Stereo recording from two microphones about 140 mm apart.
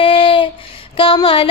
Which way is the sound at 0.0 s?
40° left (ahead or behind).